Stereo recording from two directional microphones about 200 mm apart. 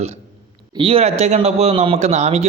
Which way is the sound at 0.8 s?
30° right (ahead or behind).